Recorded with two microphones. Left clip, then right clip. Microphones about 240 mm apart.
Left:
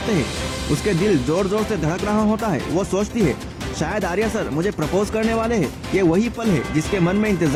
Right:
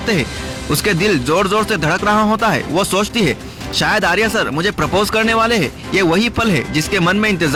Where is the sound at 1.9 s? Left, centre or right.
Right.